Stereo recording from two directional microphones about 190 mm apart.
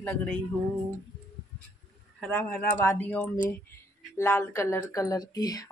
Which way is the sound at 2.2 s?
10° left (ahead or behind).